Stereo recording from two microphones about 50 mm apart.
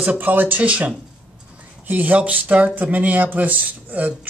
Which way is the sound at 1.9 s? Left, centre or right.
Right.